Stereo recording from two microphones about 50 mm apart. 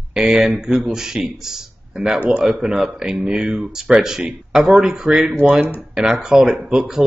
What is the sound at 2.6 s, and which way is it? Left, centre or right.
Speech, centre.